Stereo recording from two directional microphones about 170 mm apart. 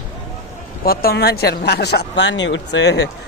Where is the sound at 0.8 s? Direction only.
65° left (ahead or behind).